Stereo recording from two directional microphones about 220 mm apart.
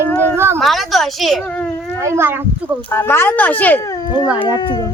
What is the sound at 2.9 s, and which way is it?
Speech, 10° left (ahead or behind).